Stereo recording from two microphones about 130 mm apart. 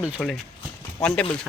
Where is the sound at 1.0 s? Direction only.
10° left (ahead or behind).